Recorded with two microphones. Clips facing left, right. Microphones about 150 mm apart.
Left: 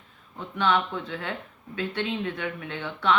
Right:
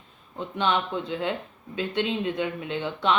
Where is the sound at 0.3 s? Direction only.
20° right (ahead or behind).